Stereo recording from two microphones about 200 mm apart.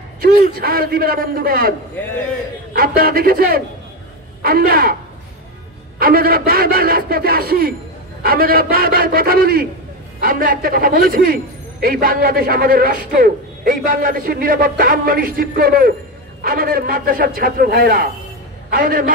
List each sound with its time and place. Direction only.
0.4 s a man's voice: 50° right (ahead or behind)
5.9 s a man's voice: 50° right (ahead or behind)